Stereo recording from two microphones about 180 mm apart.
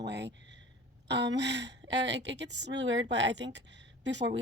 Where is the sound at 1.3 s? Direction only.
70° right (ahead or behind).